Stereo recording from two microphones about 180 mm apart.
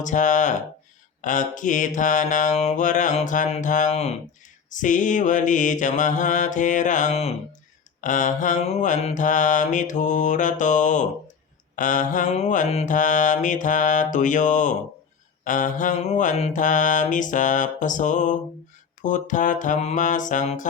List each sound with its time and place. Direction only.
0.0 s mantra: 45° left (ahead or behind)